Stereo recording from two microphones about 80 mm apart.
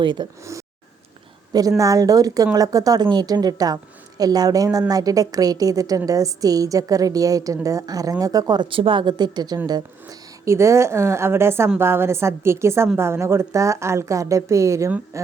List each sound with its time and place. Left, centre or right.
0.0 s speech: right
1.8 s a woman's voice: right
10.4 s speech: right